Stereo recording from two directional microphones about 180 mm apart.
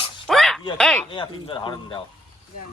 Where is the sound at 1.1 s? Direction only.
30° left (ahead or behind).